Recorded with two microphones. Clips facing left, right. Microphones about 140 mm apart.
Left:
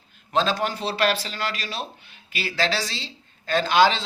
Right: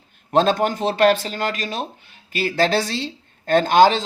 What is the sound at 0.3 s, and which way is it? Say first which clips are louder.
A woman's voice: right 6 dB; 50° right (ahead or behind).